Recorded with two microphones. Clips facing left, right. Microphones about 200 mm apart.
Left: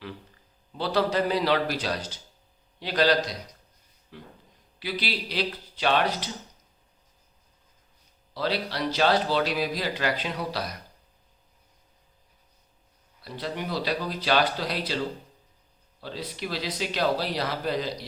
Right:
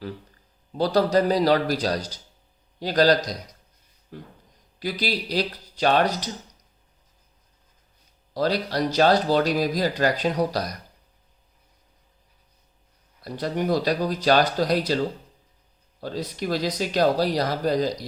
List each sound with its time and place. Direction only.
0.7 s speech: 40° right (ahead or behind)
8.3 s speech: 40° right (ahead or behind)
13.2 s speech: 45° right (ahead or behind)
16.0 s speech: 45° right (ahead or behind)